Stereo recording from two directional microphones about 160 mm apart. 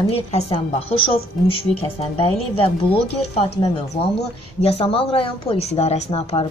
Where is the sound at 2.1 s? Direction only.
35° left (ahead or behind).